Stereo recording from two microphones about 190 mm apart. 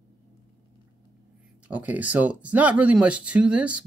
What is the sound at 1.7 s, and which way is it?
Speech, 5° right (ahead or behind).